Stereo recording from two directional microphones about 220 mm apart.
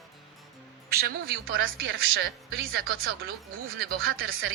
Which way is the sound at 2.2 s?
45° right (ahead or behind).